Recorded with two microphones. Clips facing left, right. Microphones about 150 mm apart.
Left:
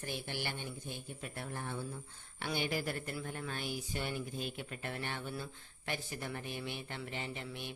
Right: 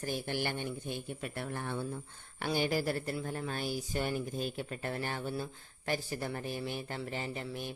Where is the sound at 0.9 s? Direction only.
60° right (ahead or behind).